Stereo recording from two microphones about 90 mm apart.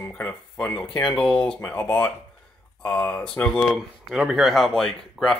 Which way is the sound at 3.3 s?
15° left (ahead or behind).